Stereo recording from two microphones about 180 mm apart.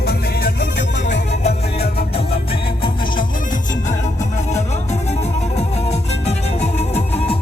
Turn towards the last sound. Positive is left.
turn(degrees=35)  # may be behind; listen again after turning